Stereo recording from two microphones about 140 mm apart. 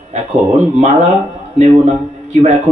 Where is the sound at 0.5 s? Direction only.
60° right (ahead or behind).